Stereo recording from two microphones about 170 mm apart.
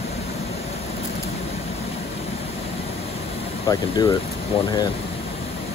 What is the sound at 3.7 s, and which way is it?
Speech, 20° left (ahead or behind).